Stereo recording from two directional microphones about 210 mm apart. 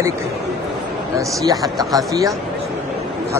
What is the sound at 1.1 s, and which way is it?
Speech, 15° right (ahead or behind).